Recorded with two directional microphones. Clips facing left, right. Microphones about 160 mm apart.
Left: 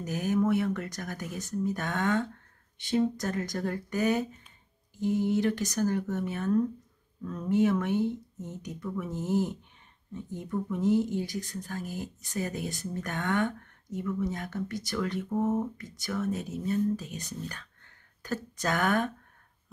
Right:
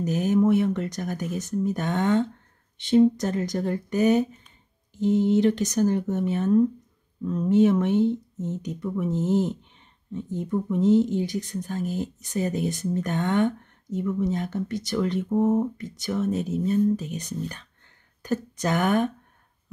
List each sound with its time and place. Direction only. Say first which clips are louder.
0.0 s speech: right 6 dB; 20° right (ahead or behind)